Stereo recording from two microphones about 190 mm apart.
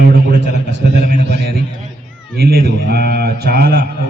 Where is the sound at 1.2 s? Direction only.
60° right (ahead or behind).